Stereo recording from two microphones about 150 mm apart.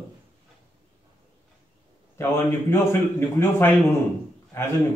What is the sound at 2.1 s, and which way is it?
Speech, 15° left (ahead or behind).